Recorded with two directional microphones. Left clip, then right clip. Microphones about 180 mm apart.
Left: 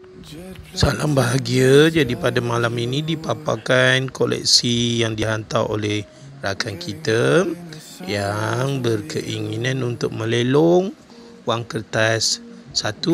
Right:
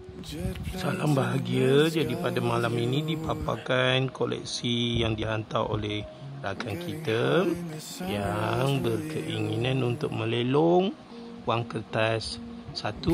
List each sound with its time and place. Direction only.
0.8 s speech: 20° left (ahead or behind)
7.4 s speech: centre (ahead or behind)
8.1 s speech: 15° left (ahead or behind)